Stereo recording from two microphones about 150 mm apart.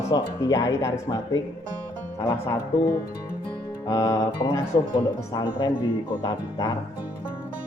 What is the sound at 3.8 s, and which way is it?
Speech, 20° left (ahead or behind).